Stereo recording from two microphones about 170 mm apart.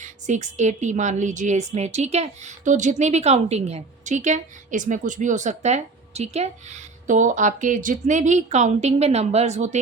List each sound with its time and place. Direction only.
0.0 s a woman's voice: 45° right (ahead or behind)